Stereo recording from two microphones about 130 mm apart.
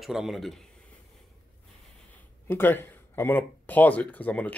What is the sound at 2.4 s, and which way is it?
Speech, 15° left (ahead or behind).